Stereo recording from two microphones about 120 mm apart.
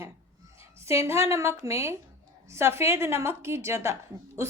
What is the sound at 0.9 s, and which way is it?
Speech, 25° right (ahead or behind).